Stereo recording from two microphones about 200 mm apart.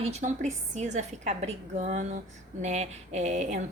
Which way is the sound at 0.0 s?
35° right (ahead or behind).